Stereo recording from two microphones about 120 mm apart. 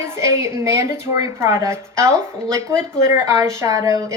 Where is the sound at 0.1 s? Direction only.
25° right (ahead or behind).